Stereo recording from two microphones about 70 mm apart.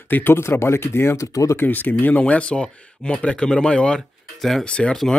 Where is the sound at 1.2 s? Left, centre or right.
Left.